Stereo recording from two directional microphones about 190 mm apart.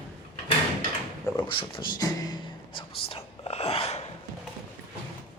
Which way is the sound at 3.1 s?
30° left (ahead or behind).